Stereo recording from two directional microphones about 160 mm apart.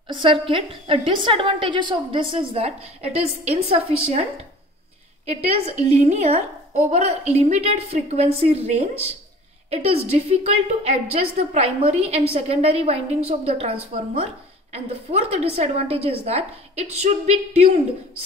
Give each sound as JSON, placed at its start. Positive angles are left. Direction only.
{"t": 0.1, "sound": "a woman's voice", "side_deg": -35}
{"t": 5.2, "sound": "a woman's voice", "side_deg": -40}